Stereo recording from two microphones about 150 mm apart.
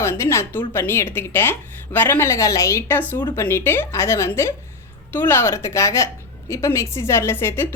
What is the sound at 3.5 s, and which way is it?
A woman's voice, 15° left (ahead or behind).